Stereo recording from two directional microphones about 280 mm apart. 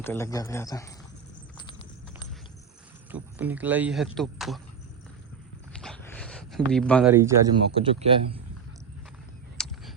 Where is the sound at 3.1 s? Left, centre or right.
Centre.